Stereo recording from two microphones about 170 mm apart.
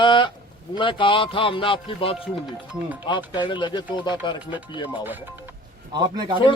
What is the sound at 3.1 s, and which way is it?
Mantra, 25° left (ahead or behind).